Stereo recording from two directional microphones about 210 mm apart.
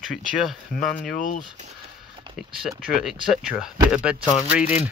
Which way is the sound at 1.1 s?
40° left (ahead or behind).